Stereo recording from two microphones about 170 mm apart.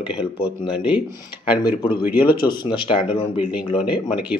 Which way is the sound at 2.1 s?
60° left (ahead or behind).